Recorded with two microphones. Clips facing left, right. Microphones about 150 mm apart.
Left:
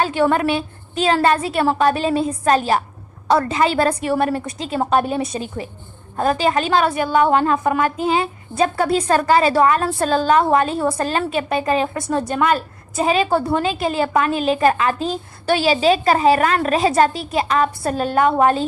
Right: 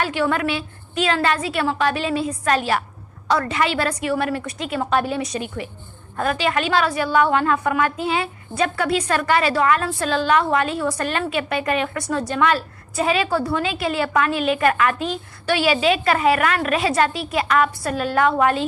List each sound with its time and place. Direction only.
0.0 s a woman's voice: 35° left (ahead or behind)
3.6 s a woman's voice: 40° left (ahead or behind)
5.2 s a woman's voice: 30° left (ahead or behind)
12.3 s a woman's voice: 50° left (ahead or behind)
13.0 s a woman's voice: 35° left (ahead or behind)
13.6 s a woman's voice: 40° left (ahead or behind)